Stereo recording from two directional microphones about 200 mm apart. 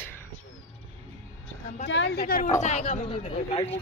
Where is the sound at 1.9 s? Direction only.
55° left (ahead or behind).